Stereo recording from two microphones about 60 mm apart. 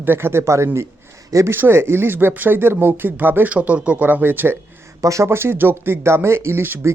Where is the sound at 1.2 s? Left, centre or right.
Right.